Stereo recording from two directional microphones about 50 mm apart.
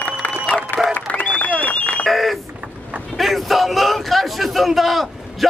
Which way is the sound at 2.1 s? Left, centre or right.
Centre.